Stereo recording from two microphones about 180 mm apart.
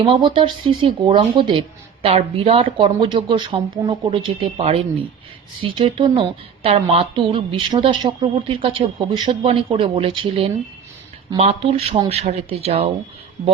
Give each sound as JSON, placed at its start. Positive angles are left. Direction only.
{"t": 0.0, "sound": "a woman's voice", "side_deg": -25}